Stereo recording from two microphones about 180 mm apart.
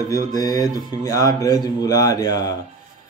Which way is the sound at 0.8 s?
20° left (ahead or behind).